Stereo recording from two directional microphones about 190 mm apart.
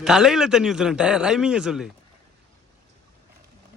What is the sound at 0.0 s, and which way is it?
Speech, centre (ahead or behind).